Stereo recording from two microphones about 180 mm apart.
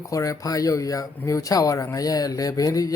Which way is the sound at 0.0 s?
20° left (ahead or behind).